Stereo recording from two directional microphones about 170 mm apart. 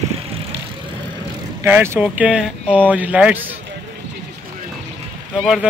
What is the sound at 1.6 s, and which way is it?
Speech, 10° right (ahead or behind).